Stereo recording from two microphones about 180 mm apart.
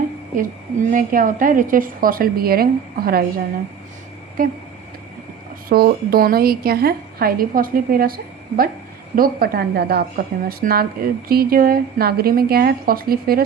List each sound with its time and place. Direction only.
0.3 s a woman's voice: 45° right (ahead or behind)
4.4 s a woman's voice: 50° right (ahead or behind)
5.6 s a woman's voice: 55° right (ahead or behind)